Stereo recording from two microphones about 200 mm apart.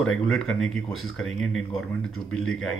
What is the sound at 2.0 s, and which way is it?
Speech, 90° left.